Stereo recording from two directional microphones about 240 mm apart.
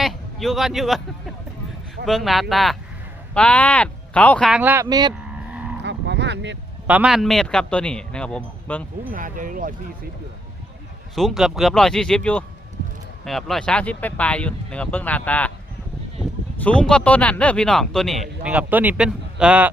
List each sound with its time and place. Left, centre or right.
0.0 s speech: centre
2.0 s speech: centre
5.8 s a sound: right
6.8 s speech: centre
9.1 s speech: right
11.1 s speech: centre
16.6 s speech: centre